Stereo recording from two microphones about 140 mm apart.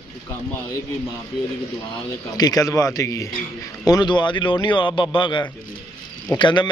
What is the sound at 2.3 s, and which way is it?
A man's voice, 25° left (ahead or behind).